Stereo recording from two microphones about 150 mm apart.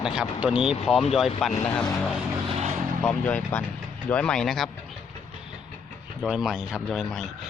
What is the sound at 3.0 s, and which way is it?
Speech, 10° left (ahead or behind).